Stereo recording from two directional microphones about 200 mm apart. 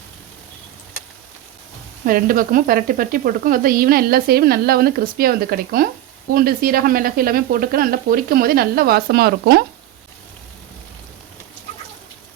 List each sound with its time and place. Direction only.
2.0 s sizzle: 45° right (ahead or behind)